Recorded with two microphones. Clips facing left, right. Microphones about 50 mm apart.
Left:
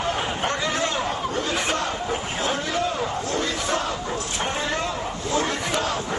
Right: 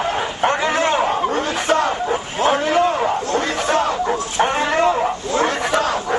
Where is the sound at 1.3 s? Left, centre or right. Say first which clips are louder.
Right 6 dB; right.